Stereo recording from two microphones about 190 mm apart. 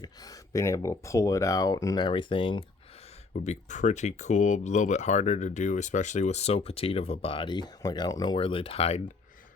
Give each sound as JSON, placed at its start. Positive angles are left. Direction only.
{"t": 0.0, "sound": "speech", "side_deg": 20}
{"t": 3.3, "sound": "speech", "side_deg": 40}